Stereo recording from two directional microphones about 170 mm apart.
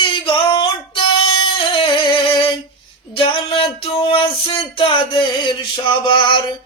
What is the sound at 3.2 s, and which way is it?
Music, 30° left (ahead or behind).